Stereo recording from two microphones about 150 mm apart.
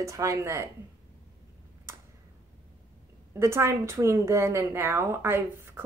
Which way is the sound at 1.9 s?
20° right (ahead or behind).